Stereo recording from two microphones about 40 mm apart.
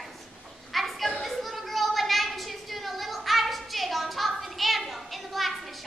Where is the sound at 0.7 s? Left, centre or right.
Centre.